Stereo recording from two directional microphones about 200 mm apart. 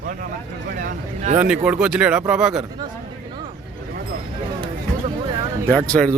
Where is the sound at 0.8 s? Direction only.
40° right (ahead or behind).